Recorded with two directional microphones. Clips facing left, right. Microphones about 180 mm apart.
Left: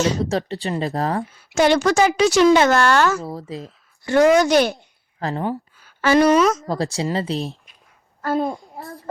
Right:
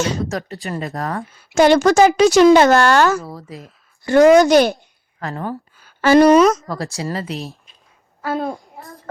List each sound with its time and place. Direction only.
0.3 s speech: 30° left (ahead or behind)
1.5 s a woman's voice: 40° right (ahead or behind)
3.2 s speech: 25° left (ahead or behind)
4.0 s a woman's voice: 40° right (ahead or behind)
5.2 s speech: 20° left (ahead or behind)
6.0 s a woman's voice: 35° right (ahead or behind)
6.7 s speech: 25° left (ahead or behind)
8.2 s a child's voice: centre (ahead or behind)